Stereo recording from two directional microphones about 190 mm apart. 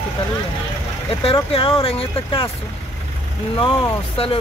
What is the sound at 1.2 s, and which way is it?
Speech, 30° left (ahead or behind).